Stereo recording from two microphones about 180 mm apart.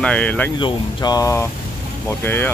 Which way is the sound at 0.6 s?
25° left (ahead or behind).